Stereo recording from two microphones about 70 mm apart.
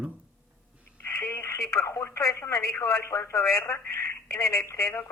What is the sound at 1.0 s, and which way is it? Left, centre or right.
Speech, left.